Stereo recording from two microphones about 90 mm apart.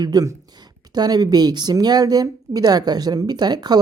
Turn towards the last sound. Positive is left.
turn(degrees=-50)  # may be behind; listen again after turning